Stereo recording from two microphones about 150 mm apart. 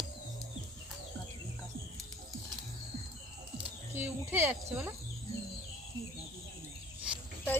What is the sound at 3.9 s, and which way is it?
Speech, 15° right (ahead or behind).